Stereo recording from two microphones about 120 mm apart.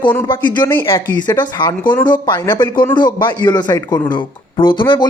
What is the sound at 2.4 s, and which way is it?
Speech, 20° left (ahead or behind).